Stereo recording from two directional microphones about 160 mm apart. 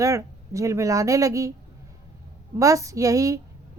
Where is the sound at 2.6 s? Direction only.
20° right (ahead or behind).